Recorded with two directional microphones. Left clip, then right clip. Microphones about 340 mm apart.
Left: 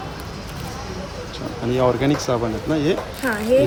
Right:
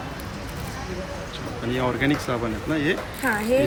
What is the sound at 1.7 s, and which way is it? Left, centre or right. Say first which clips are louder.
Speech: left 5 dB; centre.